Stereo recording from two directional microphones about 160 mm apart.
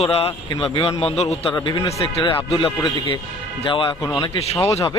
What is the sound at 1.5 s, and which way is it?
Speech, 25° left (ahead or behind).